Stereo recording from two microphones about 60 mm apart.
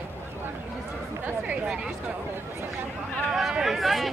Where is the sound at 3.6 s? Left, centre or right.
Centre.